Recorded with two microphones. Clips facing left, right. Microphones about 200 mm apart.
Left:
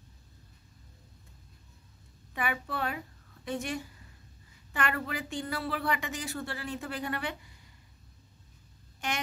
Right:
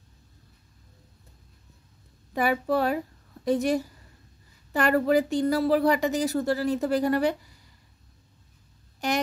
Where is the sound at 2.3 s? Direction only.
40° right (ahead or behind).